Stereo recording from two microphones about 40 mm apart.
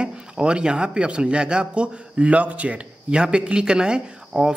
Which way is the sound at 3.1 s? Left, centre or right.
Right.